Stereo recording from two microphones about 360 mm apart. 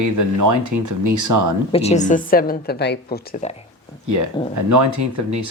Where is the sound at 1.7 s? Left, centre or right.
Centre.